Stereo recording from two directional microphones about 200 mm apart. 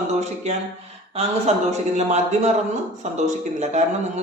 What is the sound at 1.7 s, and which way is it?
A man's voice, 35° right (ahead or behind).